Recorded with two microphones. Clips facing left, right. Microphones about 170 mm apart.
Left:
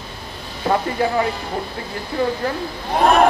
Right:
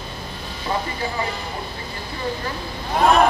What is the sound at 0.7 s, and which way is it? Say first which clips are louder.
Speech: left 6 dB; 65° left (ahead or behind).